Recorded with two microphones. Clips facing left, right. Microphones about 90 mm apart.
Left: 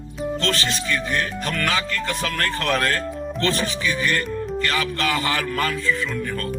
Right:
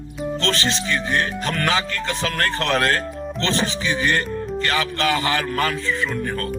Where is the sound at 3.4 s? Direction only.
25° right (ahead or behind); by 6.5 s 40° right (ahead or behind).